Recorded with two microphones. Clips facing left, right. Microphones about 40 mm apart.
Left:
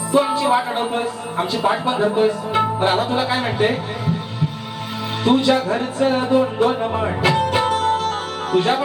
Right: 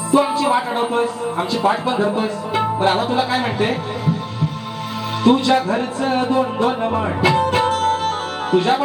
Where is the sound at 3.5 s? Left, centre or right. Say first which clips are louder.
Left 1 dB; centre.